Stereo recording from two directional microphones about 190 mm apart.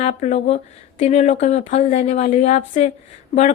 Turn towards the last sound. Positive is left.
turn(degrees=35)  # may be behind; listen again after turning